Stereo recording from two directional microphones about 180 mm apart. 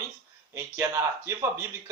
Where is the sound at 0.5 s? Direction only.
15° right (ahead or behind).